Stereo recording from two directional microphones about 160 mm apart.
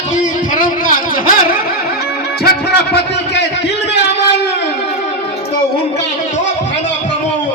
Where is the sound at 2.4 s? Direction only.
90° left.